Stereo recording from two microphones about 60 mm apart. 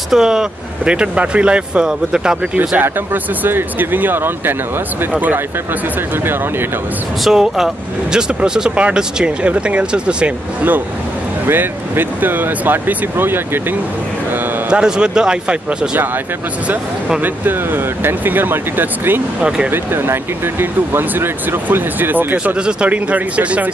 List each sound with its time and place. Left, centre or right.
0.1 s speech: centre
3.4 s speech: right
7.2 s speech: centre
11.4 s speech: right
14.7 s speech: centre
18.0 s speech: right
19.4 s speech: centre
19.7 s speech: right
22.4 s speech: centre